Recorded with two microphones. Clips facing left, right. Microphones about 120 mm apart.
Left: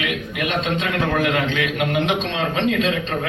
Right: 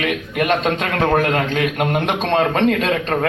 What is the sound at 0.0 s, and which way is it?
A man's voice, 45° right (ahead or behind).